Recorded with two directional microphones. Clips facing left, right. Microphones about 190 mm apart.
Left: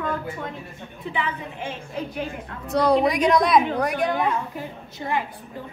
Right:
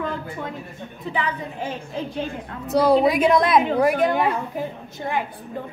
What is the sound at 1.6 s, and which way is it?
Speech, 30° right (ahead or behind).